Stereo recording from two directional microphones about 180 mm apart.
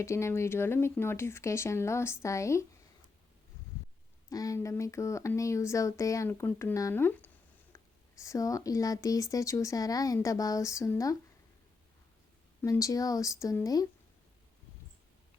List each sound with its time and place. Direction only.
0.0 s speech: 15° left (ahead or behind)
4.3 s speech: 20° left (ahead or behind)
7.7 s a sound: 15° left (ahead or behind)
8.2 s speech: 20° left (ahead or behind)
12.6 s speech: 20° left (ahead or behind)